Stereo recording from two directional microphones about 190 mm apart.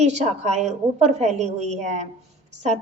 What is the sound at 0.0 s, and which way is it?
A woman's voice, 35° right (ahead or behind).